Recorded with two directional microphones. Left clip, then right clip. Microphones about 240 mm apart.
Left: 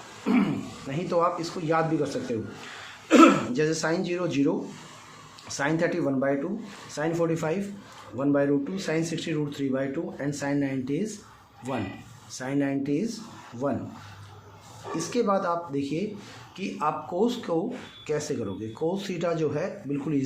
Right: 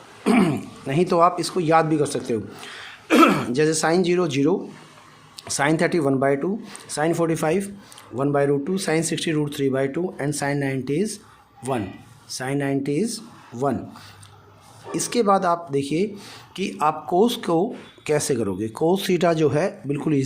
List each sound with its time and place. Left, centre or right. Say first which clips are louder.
0.3 s speech: right 6 dB; right
12.3 s speech: right 4 dB; right
13.5 s speech: right 6 dB; right
14.9 s speech: right 6 dB; right